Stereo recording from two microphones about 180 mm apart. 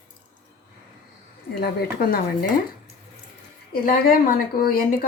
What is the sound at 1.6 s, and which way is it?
Speech, 60° left (ahead or behind).